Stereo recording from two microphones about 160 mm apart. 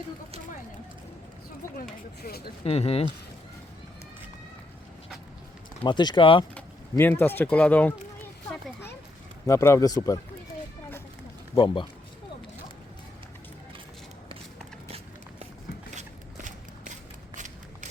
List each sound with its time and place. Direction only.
2.2 s speech: 75° left (ahead or behind)
2.6 s speech: 40° left (ahead or behind)
5.8 s speech: 30° left (ahead or behind)
6.9 s speech: 15° left (ahead or behind)
9.5 s speech: 20° left (ahead or behind)
11.5 s speech: 30° left (ahead or behind)
16.0 s a sound: 50° right (ahead or behind)